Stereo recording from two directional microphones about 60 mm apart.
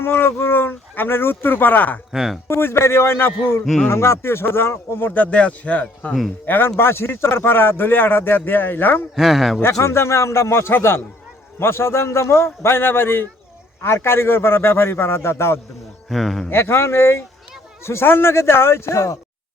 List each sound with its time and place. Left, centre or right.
0.0 s speech: left
2.1 s speech: centre
2.5 s a man's voice: left
6.4 s a man's voice: left
9.1 s speech: centre
9.8 s a man's voice: left
16.0 s speech: centre
16.5 s a man's voice: left